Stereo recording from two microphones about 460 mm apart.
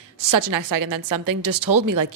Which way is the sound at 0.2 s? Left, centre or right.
Right.